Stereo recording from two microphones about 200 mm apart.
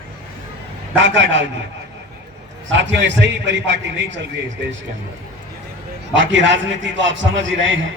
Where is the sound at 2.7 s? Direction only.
65° right (ahead or behind).